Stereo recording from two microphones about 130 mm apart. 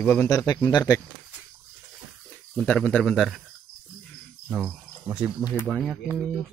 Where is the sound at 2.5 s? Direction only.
10° left (ahead or behind).